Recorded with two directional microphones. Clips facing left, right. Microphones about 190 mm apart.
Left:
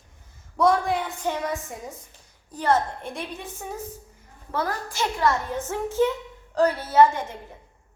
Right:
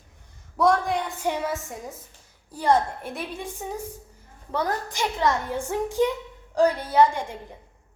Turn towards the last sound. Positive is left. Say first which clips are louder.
# left 2 dB
turn(degrees=-15)  # may be behind; listen again after turning